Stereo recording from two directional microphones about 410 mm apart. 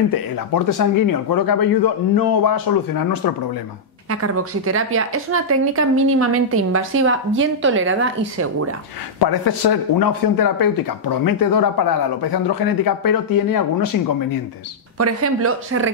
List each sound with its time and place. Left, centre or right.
0.1 s speech: left
4.1 s a woman's voice: right
9.2 s speech: left
15.0 s a woman's voice: right